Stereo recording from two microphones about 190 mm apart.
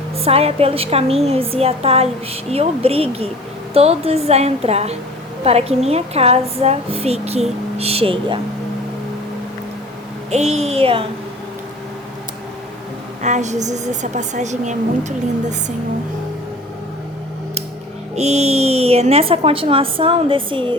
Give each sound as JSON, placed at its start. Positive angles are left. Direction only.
{"t": 0.2, "sound": "a woman's voice", "side_deg": -30}
{"t": 10.3, "sound": "a woman's voice", "side_deg": -35}
{"t": 13.2, "sound": "a woman's voice", "side_deg": -40}
{"t": 18.1, "sound": "a woman's voice", "side_deg": -35}